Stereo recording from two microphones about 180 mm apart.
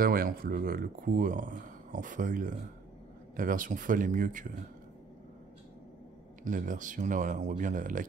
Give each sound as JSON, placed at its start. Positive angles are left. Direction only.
{"t": 0.0, "sound": "speech", "side_deg": -55}
{"t": 6.4, "sound": "speech", "side_deg": -45}